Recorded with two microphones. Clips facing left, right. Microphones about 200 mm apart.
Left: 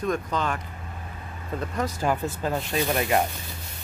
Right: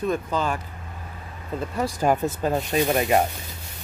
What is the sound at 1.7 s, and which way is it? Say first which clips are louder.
Speech: right 4 dB; 10° right (ahead or behind).